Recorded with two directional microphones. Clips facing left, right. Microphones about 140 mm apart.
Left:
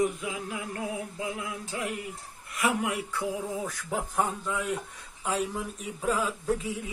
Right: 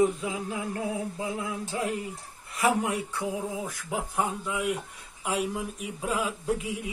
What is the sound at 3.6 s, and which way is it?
Speech, 15° right (ahead or behind).